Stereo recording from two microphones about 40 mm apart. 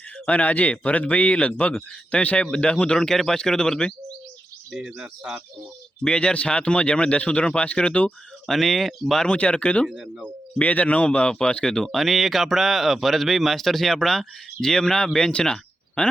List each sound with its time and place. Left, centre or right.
0.3 s speech: left
3.0 s a man's voice: centre
6.1 s speech: left
8.4 s speech: centre
9.2 s speech: left
11.9 s speech: centre; by 16.1 s left